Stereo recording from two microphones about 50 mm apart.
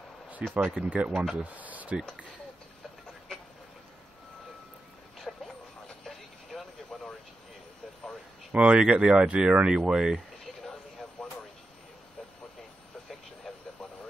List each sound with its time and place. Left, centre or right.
0.5 s speech: centre
0.8 s speech: right
5.3 s vehicle: centre
6.9 s vehicle: centre
8.5 s speech: right
10.4 s a sound: centre